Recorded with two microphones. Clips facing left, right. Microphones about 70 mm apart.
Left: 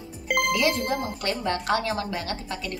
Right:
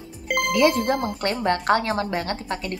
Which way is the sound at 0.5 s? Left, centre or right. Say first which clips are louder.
Right 8 dB; right.